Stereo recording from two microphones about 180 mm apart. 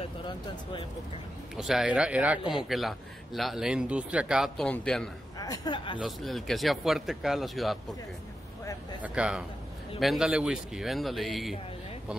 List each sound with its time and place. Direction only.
1.6 s speech: centre (ahead or behind)
5.4 s speech: 20° left (ahead or behind)
5.9 s speech: centre (ahead or behind)
9.0 s speech: 5° right (ahead or behind)